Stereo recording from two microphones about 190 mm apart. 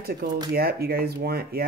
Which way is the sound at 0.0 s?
55° right (ahead or behind).